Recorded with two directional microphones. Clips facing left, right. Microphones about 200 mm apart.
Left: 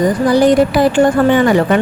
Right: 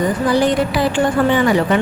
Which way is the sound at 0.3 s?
40° left (ahead or behind).